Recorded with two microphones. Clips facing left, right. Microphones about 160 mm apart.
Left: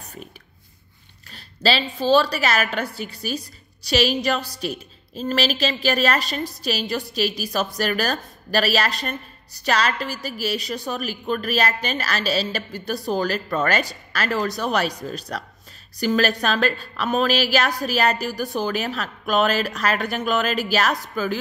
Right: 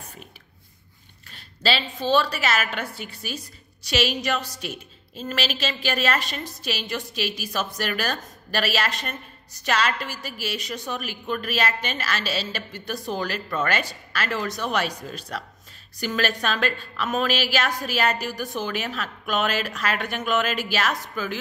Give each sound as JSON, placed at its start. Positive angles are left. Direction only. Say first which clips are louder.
{"t": 1.3, "sound": "a woman's voice", "louder": "left 3 dB", "side_deg": 40}